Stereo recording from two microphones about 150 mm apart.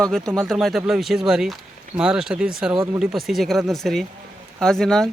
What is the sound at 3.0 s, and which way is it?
Speech, centre (ahead or behind).